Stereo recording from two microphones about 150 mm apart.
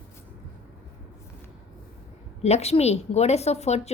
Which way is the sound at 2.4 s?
45° left (ahead or behind).